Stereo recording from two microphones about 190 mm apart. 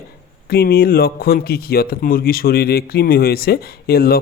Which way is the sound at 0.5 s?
55° left (ahead or behind).